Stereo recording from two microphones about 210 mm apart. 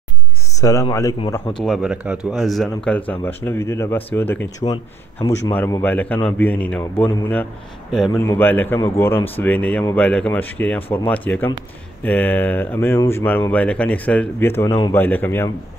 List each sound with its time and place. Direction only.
0.6 s speech: 15° left (ahead or behind)
1.6 s speech: centre (ahead or behind)